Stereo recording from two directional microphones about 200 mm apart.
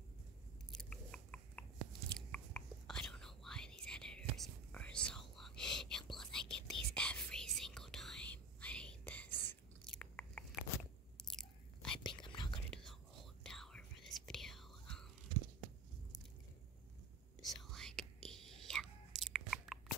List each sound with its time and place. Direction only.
0.7 s biting: 5° left (ahead or behind)
6.9 s whispering: 5° left (ahead or behind)
11.1 s chewing: 5° left (ahead or behind)
12.0 s whispering: 25° left (ahead or behind)
13.4 s whispering: centre (ahead or behind)
17.4 s whispering: centre (ahead or behind)